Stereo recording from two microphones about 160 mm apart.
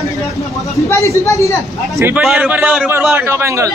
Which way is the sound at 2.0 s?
15° right (ahead or behind).